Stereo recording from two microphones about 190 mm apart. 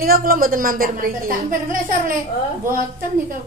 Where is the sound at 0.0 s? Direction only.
50° right (ahead or behind).